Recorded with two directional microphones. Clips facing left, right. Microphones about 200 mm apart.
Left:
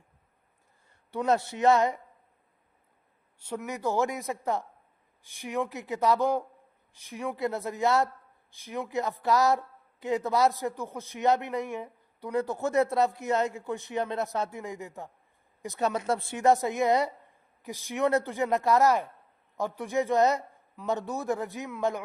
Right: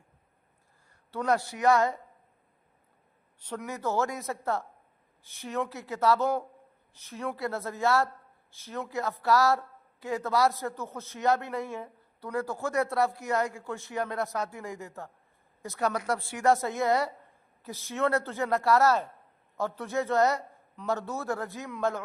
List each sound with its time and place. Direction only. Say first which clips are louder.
1.1 s a woman's voice: left 2 dB; 25° left (ahead or behind)
3.7 s a woman's voice: left 1 dB; 15° left (ahead or behind)